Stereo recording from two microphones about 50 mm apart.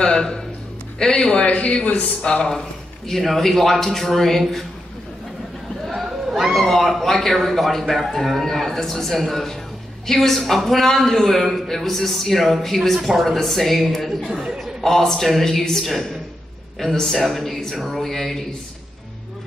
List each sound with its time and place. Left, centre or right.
0.0 s a sound: centre
0.9 s a man's voice: centre
5.9 s a man's voice: centre
14.3 s speech: centre
14.6 s a man's voice: centre